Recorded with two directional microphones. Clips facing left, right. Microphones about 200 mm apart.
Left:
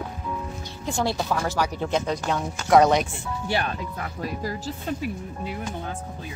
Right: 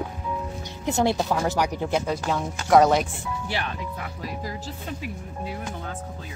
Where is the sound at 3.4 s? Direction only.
35° left (ahead or behind).